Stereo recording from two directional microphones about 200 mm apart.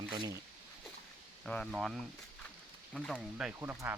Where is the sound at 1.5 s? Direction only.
5° left (ahead or behind).